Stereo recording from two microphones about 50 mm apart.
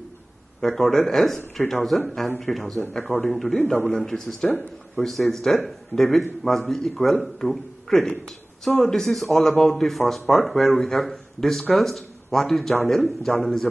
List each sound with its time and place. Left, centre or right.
0.6 s speech: centre
2.9 s a man's voice: centre
3.3 s speech: centre